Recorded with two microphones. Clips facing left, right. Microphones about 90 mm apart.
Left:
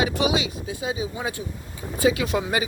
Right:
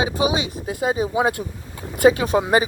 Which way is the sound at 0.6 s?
50° right (ahead or behind).